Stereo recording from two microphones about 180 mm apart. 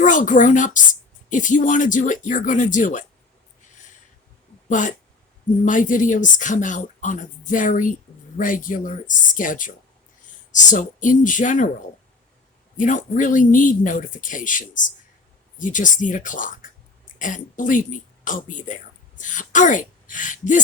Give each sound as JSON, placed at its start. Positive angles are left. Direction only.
{"t": 0.0, "sound": "speech", "side_deg": 45}
{"t": 4.7, "sound": "speech", "side_deg": 45}
{"t": 12.7, "sound": "speech", "side_deg": 45}